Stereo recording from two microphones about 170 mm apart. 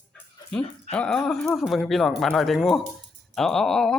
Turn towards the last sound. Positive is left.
turn(degrees=0)  # may be behind; listen again after turning